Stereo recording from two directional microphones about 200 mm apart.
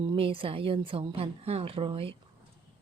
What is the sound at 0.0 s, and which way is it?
Speech, 25° right (ahead or behind).